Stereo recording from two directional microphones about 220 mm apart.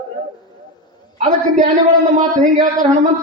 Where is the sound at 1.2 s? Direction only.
30° right (ahead or behind).